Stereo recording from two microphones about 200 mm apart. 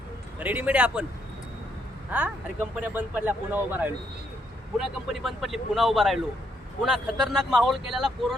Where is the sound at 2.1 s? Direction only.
5° right (ahead or behind).